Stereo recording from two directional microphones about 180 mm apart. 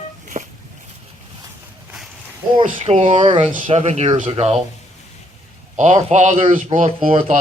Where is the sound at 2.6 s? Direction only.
35° right (ahead or behind).